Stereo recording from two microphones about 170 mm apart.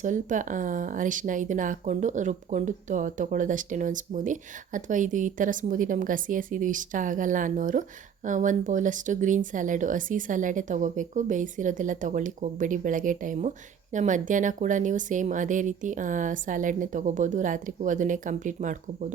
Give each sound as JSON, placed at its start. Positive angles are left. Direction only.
{"t": 0.0, "sound": "speech", "side_deg": -50}